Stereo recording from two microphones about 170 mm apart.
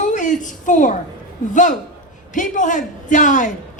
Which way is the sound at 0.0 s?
50° left (ahead or behind).